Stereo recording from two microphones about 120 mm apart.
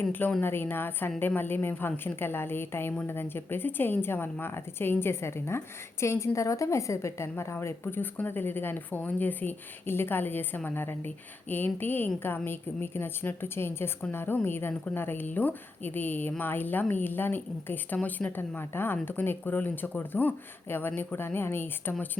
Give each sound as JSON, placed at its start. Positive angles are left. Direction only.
{"t": 0.1, "sound": "a woman's voice", "side_deg": 15}